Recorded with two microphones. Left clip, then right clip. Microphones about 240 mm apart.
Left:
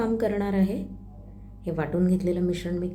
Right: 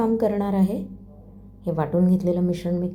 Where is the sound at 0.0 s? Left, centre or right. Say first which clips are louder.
Right 4 dB; centre.